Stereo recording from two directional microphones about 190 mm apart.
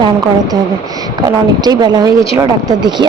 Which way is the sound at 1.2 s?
20° right (ahead or behind).